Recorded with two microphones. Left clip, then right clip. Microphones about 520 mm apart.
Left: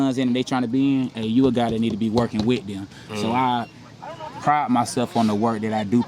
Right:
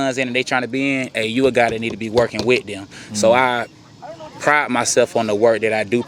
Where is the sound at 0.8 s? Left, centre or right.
Right.